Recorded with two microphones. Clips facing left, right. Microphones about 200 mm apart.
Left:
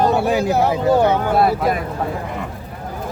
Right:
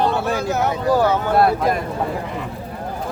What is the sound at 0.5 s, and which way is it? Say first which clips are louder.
Speech: left 1 dB; 30° left (ahead or behind).